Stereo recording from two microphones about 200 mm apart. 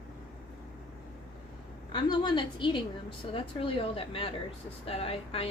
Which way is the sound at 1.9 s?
20° left (ahead or behind).